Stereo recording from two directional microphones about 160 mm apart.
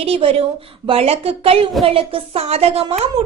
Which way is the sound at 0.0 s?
35° right (ahead or behind).